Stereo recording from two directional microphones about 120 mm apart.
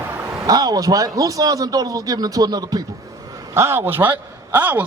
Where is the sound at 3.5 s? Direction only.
20° right (ahead or behind).